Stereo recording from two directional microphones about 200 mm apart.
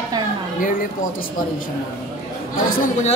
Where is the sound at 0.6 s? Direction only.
45° left (ahead or behind).